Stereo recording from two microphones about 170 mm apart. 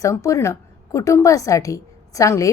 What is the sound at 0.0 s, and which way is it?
A woman's voice, 20° left (ahead or behind).